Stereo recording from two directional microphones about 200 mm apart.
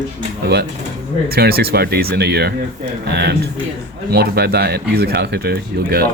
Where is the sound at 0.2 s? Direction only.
50° right (ahead or behind).